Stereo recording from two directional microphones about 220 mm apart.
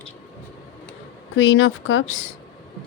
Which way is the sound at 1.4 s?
60° left (ahead or behind).